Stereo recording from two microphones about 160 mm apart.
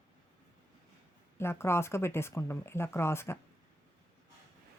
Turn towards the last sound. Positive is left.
turn(degrees=15)  # may be behind; listen again after turning